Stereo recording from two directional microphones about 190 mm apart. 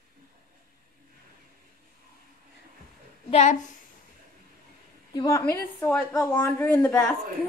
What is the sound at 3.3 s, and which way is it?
Speech, 35° left (ahead or behind).